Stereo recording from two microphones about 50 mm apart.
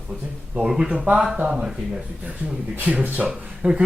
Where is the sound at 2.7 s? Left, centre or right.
Right.